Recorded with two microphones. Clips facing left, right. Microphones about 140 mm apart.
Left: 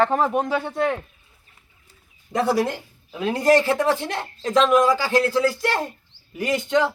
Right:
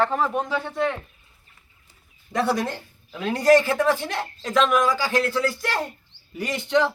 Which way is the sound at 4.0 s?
30° left (ahead or behind).